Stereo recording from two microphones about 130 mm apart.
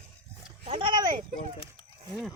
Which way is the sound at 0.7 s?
40° right (ahead or behind).